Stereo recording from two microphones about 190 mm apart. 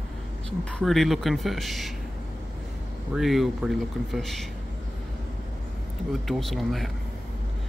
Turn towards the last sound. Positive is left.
turn(degrees=0)  # may be behind; listen again after turning